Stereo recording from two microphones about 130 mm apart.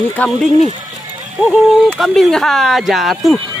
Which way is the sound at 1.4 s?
Centre (ahead or behind).